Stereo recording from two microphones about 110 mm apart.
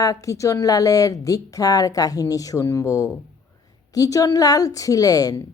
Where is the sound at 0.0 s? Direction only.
30° left (ahead or behind).